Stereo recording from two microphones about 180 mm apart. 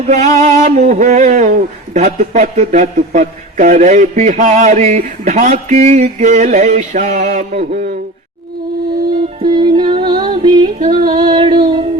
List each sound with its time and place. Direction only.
0.3 s speech: 40° right (ahead or behind)
9.4 s music: 25° right (ahead or behind)
10.9 s a sound: 25° right (ahead or behind)